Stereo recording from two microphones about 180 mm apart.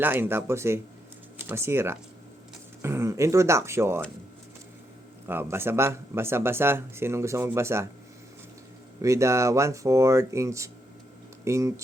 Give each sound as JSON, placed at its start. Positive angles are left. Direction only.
{"t": 0.0, "sound": "speech", "side_deg": -10}
{"t": 5.3, "sound": "speech", "side_deg": -10}
{"t": 9.0, "sound": "speech", "side_deg": -15}